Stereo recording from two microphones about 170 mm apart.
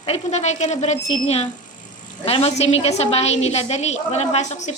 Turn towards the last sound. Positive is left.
turn(degrees=40)  # may be behind; listen again after turning